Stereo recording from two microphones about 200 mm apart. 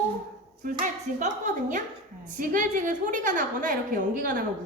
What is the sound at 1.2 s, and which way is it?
A woman's voice, 40° right (ahead or behind).